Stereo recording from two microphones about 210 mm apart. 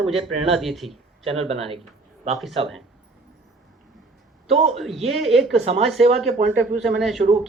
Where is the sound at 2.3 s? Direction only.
Centre (ahead or behind).